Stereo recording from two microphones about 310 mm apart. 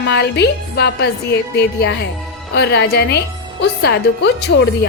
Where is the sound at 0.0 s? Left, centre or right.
Left.